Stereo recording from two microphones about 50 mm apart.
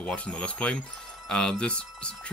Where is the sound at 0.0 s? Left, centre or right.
Left.